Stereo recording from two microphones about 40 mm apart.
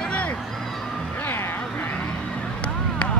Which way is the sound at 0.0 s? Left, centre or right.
Left.